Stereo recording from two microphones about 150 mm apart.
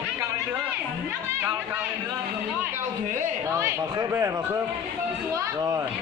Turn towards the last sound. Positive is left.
turn(degrees=-20)  # may be behind; listen again after turning